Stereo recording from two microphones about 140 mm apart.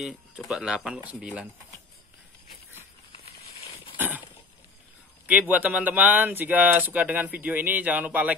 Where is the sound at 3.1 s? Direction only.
45° left (ahead or behind).